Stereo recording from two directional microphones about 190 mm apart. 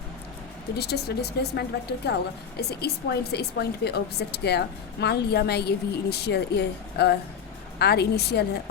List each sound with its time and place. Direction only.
0.8 s speech: 60° left (ahead or behind)